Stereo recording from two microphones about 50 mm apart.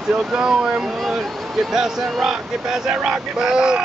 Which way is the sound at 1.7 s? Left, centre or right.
Centre.